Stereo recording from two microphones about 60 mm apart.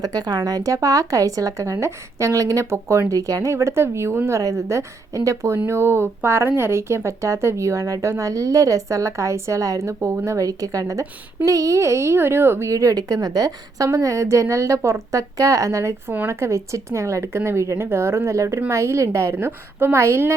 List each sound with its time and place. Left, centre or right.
0.0 s speech: right
1.7 s a woman's voice: right
3.1 s speech: right
3.5 s speech: right
4.3 s a woman's voice: right
5.6 s speech: right
8.2 s a woman's voice: right
10.2 s speech: right
12.7 s a woman's voice: right
19.3 s speech: right